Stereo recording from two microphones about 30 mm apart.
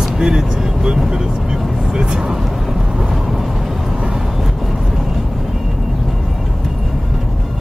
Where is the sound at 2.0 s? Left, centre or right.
Right.